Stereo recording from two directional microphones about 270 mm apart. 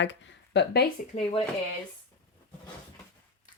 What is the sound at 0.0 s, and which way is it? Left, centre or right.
Speech, left.